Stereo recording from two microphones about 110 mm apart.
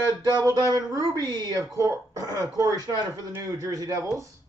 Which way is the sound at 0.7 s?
35° right (ahead or behind).